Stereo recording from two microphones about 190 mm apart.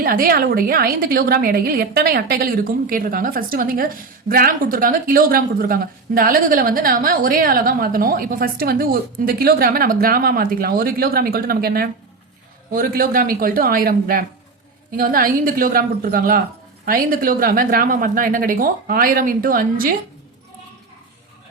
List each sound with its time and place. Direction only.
0.0 s a woman's voice: 50° right (ahead or behind)